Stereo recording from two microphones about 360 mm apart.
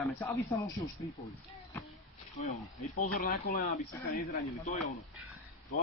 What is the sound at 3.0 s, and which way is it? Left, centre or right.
Speech, left.